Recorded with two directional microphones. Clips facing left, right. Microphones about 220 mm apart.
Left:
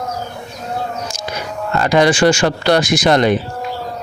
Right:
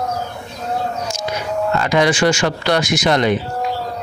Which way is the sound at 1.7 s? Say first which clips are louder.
Left 4 dB; 35° left (ahead or behind).